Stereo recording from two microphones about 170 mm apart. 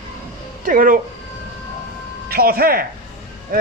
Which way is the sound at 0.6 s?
55° right (ahead or behind).